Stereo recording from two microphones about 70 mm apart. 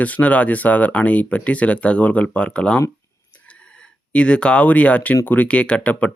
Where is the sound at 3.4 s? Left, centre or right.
Centre.